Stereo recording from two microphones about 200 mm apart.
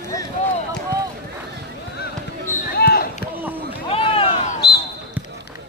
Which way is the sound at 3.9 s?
30° left (ahead or behind).